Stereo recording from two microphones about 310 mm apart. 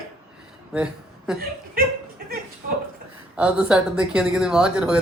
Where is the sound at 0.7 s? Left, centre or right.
Centre.